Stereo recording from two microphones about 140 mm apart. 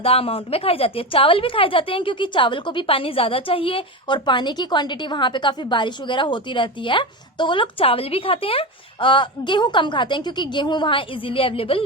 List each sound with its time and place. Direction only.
0.0 s a woman's voice: 45° left (ahead or behind)